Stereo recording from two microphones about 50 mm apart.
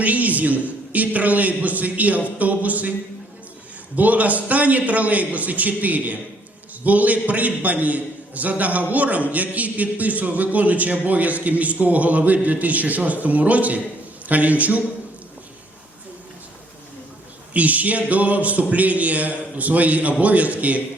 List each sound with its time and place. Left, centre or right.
0.0 s a man's voice: right
3.9 s a man's voice: right
17.5 s a man's voice: right